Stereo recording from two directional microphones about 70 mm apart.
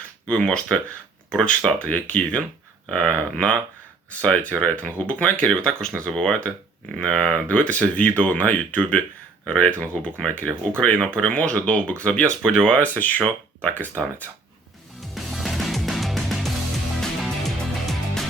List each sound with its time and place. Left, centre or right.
0.3 s speech: centre
15.1 s music: centre